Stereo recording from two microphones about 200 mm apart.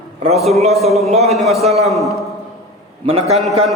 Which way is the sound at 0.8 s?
Centre (ahead or behind).